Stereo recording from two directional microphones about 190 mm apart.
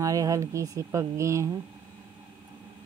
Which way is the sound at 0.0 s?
15° right (ahead or behind).